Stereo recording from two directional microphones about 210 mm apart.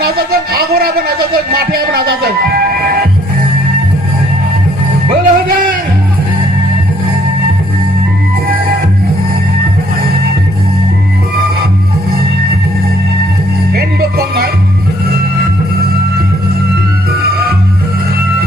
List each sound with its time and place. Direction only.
0.0 s music: 45° right (ahead or behind)
5.2 s music: 40° right (ahead or behind)
13.7 s music: 45° right (ahead or behind)